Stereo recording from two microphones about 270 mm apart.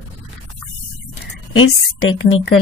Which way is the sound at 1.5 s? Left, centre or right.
Left.